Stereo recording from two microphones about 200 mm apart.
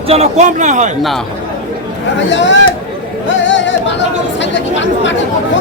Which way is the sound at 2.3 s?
65° left (ahead or behind).